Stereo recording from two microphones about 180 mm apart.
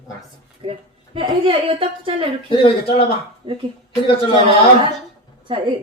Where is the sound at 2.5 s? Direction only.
30° left (ahead or behind).